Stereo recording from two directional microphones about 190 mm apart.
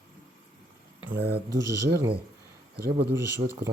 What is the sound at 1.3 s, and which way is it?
Mantra, 15° right (ahead or behind).